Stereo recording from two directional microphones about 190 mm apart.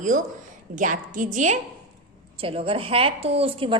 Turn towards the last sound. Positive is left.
turn(degrees=-30)  # may be behind; listen again after turning